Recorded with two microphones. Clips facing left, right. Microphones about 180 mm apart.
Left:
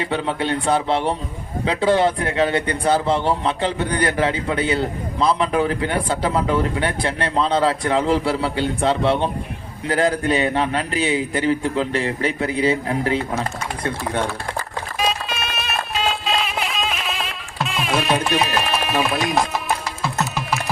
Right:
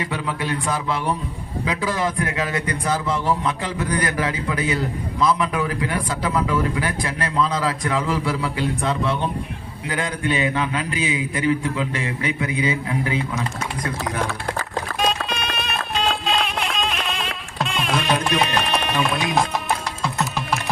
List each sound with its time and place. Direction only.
0.0 s a man's voice: 30° left (ahead or behind)
14.9 s music: 5° left (ahead or behind)